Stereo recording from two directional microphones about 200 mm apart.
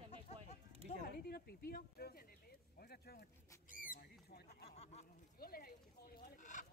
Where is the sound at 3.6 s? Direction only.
40° left (ahead or behind).